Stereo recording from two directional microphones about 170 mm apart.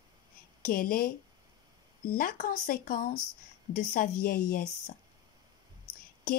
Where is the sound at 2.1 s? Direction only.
55° left (ahead or behind).